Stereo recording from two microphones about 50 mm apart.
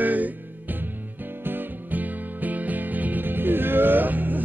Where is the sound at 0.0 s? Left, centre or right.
Right.